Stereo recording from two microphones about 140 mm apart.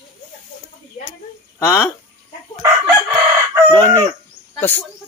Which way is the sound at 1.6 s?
20° left (ahead or behind).